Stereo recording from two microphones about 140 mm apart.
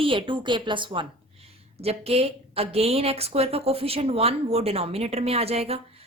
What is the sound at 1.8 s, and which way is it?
A woman's voice, 45° right (ahead or behind).